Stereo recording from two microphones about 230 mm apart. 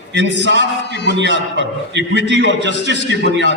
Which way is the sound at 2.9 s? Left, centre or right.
Left.